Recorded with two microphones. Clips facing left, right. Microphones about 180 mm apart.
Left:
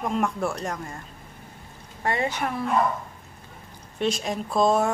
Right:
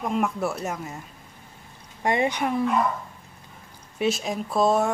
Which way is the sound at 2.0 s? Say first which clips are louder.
Right 3 dB; 15° right (ahead or behind).